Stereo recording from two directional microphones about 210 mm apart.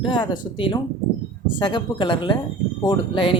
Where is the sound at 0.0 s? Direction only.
20° left (ahead or behind).